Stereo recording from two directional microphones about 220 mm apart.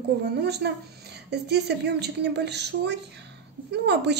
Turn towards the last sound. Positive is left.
turn(degrees=-50)  # may be behind; listen again after turning